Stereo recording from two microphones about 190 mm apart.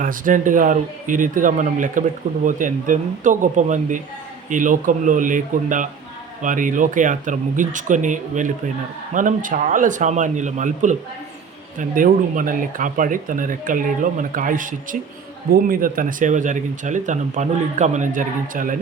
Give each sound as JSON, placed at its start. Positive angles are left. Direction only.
{"t": 0.0, "sound": "a man's voice", "side_deg": -45}